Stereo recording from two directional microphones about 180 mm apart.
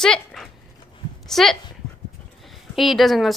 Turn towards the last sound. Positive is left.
turn(degrees=0)  # may be behind; listen again after turning